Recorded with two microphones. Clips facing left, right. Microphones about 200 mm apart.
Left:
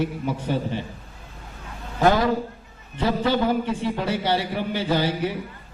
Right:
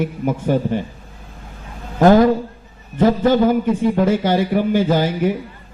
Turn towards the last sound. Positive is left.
turn(degrees=-45)  # may be behind; listen again after turning